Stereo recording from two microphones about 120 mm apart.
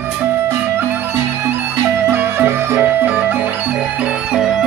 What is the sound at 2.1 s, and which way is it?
Music, 15° right (ahead or behind).